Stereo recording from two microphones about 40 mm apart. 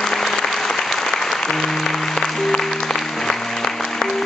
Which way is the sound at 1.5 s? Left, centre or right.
Centre.